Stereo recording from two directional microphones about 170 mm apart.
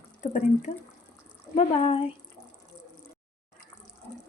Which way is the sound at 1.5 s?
35° left (ahead or behind).